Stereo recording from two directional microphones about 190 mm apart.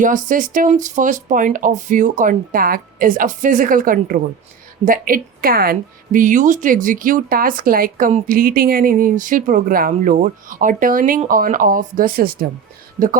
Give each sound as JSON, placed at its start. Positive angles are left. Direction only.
{"t": 0.0, "sound": "a woman's voice", "side_deg": -45}